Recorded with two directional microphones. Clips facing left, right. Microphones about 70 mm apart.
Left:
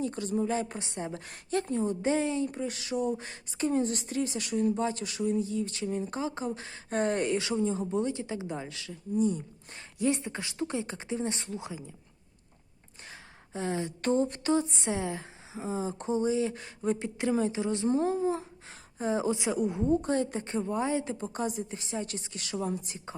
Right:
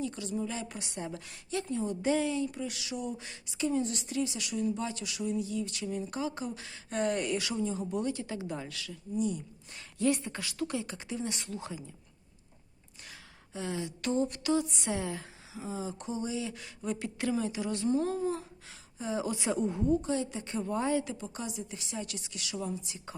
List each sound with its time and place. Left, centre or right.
0.0 s a woman's voice: left
10.0 s speech: left
13.1 s a sound: left
17.3 s speech: left
18.7 s speech: left
19.5 s a woman's voice: centre
19.9 s a woman's voice: left
20.4 s a woman's voice: left
20.7 s speech: left
21.0 s a woman's voice: left